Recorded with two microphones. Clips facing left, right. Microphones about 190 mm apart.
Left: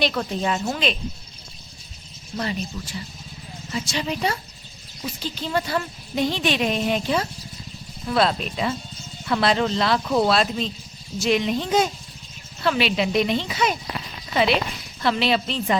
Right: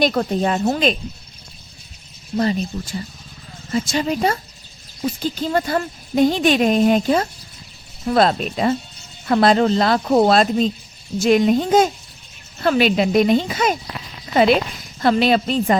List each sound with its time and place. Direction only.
0.0 s speech: 45° right (ahead or behind)
2.3 s speech: 40° right (ahead or behind)